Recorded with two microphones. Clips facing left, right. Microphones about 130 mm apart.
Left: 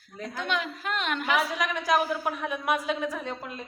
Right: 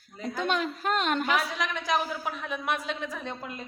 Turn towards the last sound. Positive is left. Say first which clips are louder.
# left 2 dB
turn(degrees=0)  # may be behind; listen again after turning